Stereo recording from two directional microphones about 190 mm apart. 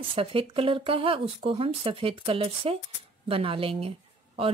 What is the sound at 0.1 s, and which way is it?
Speech, 30° right (ahead or behind).